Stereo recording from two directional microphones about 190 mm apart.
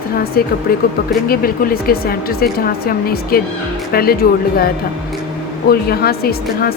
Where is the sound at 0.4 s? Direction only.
50° left (ahead or behind).